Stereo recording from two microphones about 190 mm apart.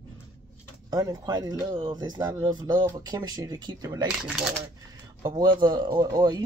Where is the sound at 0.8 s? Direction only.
20° right (ahead or behind).